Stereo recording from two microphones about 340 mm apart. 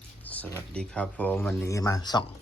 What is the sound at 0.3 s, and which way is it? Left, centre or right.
Speech, centre.